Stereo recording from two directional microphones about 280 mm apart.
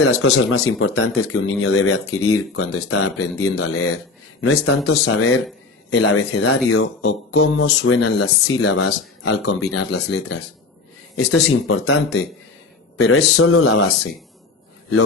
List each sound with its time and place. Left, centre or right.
0.0 s speech: left